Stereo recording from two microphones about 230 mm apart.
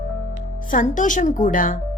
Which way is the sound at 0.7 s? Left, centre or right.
Left.